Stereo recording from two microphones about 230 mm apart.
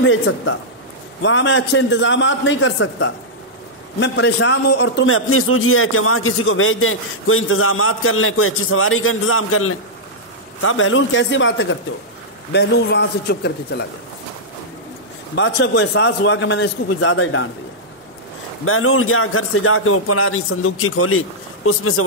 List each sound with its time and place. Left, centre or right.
0.0 s a man's voice: left
15.3 s a man's voice: left
18.7 s a man's voice: left